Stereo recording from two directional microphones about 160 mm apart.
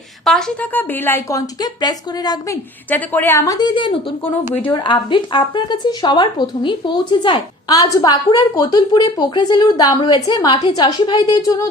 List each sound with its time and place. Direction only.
0.3 s a woman's voice: 5° left (ahead or behind); by 2.6 s 25° left (ahead or behind)
2.9 s speech: 10° left (ahead or behind)